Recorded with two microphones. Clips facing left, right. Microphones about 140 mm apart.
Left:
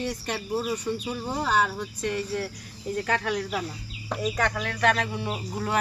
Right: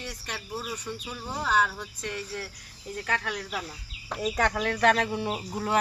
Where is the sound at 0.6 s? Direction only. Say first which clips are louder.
Left 7 dB; 15° left (ahead or behind).